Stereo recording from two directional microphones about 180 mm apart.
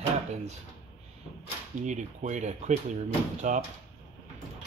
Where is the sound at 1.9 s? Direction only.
40° right (ahead or behind).